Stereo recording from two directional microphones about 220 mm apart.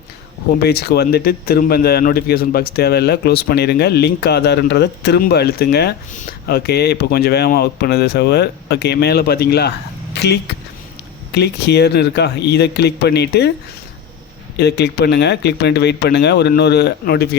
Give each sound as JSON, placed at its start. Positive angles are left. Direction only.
{"t": 0.6, "sound": "a man's voice", "side_deg": 45}
{"t": 14.5, "sound": "a man's voice", "side_deg": 50}